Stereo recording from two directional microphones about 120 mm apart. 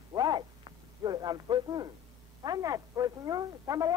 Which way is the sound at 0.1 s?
35° right (ahead or behind).